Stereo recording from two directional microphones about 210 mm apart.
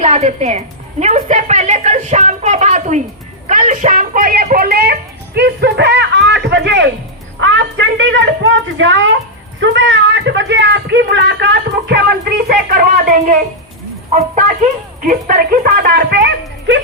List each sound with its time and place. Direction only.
0.0 s a woman's voice: 30° right (ahead or behind); by 16.8 s 55° right (ahead or behind)